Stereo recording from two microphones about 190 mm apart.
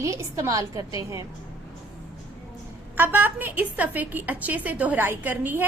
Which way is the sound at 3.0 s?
10° right (ahead or behind).